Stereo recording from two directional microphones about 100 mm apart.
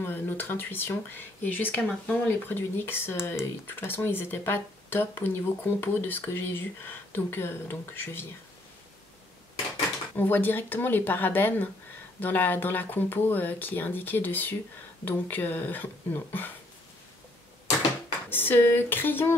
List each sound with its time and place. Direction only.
0.0 s speech: 20° left (ahead or behind)
10.1 s speech: 20° left (ahead or behind)
18.3 s speech: 20° left (ahead or behind)